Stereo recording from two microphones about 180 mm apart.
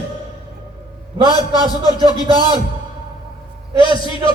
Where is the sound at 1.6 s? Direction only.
20° left (ahead or behind).